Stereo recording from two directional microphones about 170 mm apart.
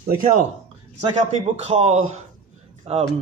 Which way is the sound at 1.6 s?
40° right (ahead or behind).